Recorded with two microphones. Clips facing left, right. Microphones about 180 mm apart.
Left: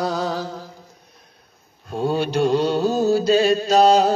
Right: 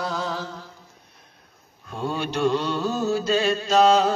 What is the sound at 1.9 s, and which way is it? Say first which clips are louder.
Mantra: left 6 dB; 35° left (ahead or behind).